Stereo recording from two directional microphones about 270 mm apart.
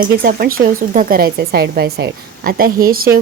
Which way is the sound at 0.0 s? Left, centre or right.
Right.